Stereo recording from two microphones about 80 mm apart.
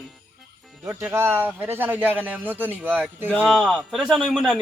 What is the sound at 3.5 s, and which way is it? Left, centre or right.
Speech, centre.